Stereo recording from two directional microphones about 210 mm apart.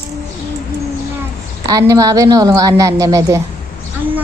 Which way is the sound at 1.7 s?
15° right (ahead or behind).